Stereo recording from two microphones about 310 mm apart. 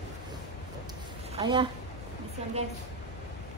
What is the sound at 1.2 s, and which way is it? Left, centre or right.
Speech, centre.